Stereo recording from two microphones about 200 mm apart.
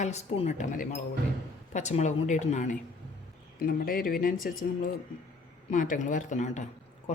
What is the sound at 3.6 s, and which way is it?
Speech, 45° left (ahead or behind).